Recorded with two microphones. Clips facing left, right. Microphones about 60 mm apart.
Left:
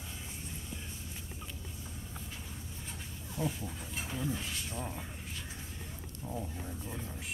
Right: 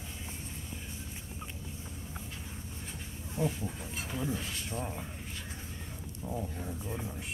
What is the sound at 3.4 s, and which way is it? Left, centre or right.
Speech, right.